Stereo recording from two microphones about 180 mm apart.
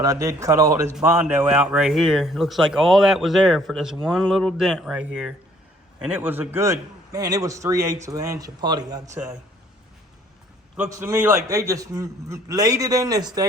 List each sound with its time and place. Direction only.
0.0 s a man's voice: 20° right (ahead or behind)
10.8 s a man's voice: 15° right (ahead or behind)